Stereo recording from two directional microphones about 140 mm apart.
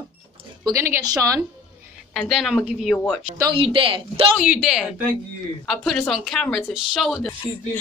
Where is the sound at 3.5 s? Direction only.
40° right (ahead or behind).